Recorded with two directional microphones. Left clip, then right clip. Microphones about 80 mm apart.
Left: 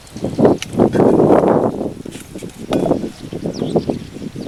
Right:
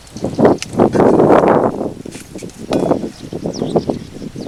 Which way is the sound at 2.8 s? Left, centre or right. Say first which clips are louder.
Right 1 dB; right.